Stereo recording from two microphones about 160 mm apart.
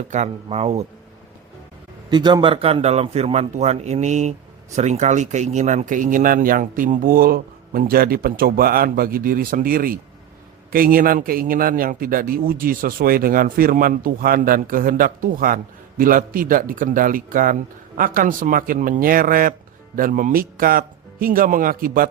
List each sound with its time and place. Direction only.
0.1 s speech: 45° right (ahead or behind)
2.0 s a man's voice: 25° right (ahead or behind); by 22.1 s 65° right (ahead or behind)